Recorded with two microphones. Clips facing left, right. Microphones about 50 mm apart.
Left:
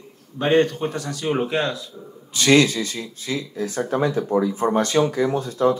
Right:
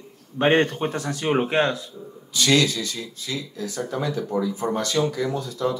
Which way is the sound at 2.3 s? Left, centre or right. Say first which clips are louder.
Left 4 dB; left.